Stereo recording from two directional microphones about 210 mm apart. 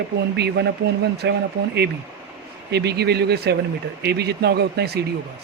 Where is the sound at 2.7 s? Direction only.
50° right (ahead or behind).